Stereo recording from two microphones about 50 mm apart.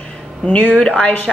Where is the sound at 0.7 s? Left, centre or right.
Centre.